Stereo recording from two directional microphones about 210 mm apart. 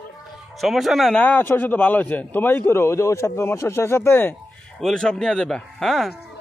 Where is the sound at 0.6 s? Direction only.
Centre (ahead or behind).